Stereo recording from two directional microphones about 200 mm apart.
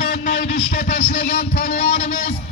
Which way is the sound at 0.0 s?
50° left (ahead or behind).